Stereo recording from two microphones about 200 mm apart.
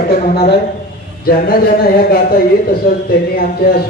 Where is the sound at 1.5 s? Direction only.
50° left (ahead or behind).